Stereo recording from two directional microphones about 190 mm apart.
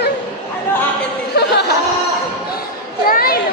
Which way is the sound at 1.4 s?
60° left (ahead or behind).